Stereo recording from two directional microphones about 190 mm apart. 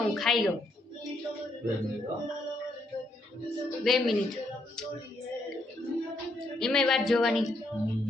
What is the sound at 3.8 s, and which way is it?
Speech, centre (ahead or behind).